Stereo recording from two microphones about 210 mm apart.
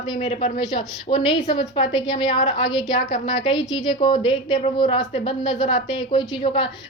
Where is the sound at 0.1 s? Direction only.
30° left (ahead or behind).